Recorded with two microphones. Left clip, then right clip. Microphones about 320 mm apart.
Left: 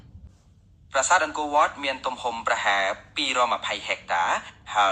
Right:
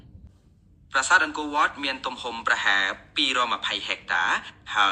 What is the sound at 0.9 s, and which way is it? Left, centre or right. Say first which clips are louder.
A man's voice: right 1 dB; centre.